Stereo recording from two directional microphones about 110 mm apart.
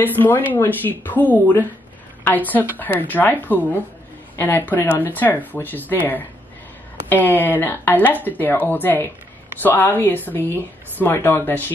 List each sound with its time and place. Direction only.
0.0 s speech: 15° left (ahead or behind)